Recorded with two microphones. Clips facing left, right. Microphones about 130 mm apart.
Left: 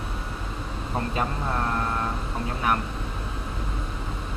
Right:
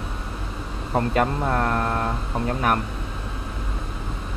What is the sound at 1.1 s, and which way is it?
Speech, 55° right (ahead or behind).